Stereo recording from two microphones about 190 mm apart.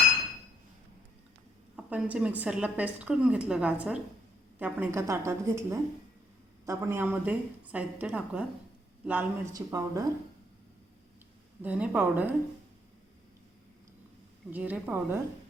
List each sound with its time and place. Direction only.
1.7 s a woman's voice: 5° right (ahead or behind)
11.6 s a woman's voice: 5° right (ahead or behind)
14.5 s a woman's voice: 10° right (ahead or behind)